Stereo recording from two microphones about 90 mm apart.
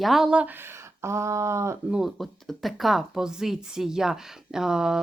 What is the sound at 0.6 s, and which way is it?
Speech, 30° right (ahead or behind).